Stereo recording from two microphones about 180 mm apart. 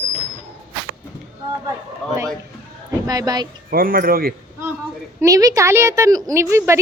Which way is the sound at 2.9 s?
20° right (ahead or behind).